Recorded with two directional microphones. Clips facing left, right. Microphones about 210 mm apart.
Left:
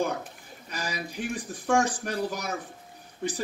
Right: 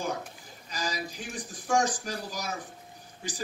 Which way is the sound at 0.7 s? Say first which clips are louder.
Even; 60° left (ahead or behind).